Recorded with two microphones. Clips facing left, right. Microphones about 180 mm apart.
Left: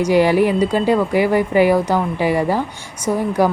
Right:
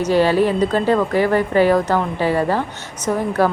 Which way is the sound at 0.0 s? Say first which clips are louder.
Left 1 dB; 15° left (ahead or behind).